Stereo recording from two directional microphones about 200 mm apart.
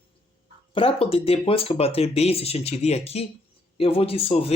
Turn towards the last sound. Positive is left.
turn(degrees=30)  # may be behind; listen again after turning